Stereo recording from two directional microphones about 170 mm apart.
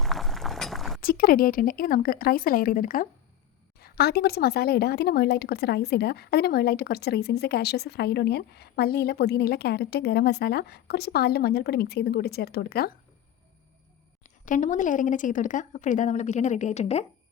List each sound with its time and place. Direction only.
0.0 s a sound: centre (ahead or behind)
1.0 s speech: 60° left (ahead or behind)
3.8 s a woman's voice: 65° left (ahead or behind)
14.3 s a woman's voice: 50° left (ahead or behind)